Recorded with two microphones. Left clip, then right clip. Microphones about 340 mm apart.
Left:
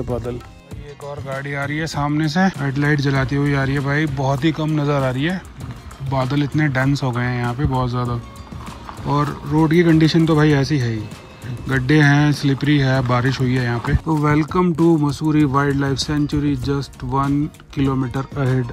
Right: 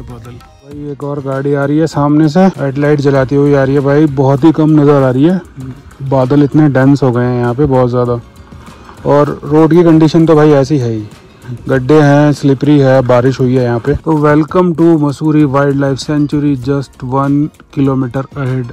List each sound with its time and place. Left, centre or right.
1.0 s speech: right
1.3 s speech: centre